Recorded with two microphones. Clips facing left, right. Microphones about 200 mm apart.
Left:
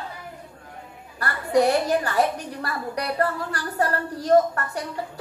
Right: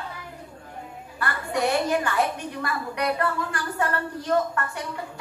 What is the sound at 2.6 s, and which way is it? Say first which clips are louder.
A woman's voice: right 2 dB; 35° left (ahead or behind).